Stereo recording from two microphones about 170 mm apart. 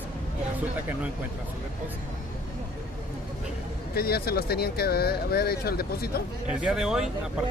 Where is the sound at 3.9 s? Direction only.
65° left (ahead or behind).